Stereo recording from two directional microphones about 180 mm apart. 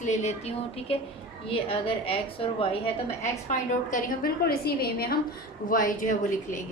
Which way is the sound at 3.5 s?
45° left (ahead or behind).